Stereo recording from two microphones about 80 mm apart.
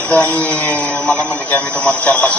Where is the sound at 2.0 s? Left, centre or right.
Centre.